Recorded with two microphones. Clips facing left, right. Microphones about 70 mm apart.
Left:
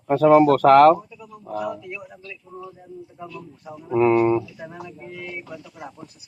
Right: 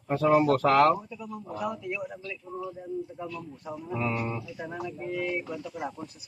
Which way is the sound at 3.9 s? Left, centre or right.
Left.